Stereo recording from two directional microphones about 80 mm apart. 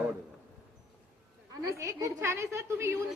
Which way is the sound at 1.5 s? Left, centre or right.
Right.